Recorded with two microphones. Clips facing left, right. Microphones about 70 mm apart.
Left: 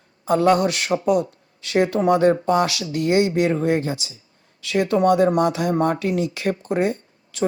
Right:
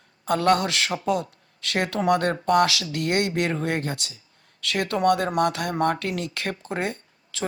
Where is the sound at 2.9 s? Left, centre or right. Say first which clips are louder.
Left 6 dB; right.